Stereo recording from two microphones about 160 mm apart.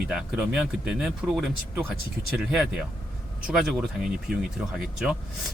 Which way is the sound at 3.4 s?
5° right (ahead or behind).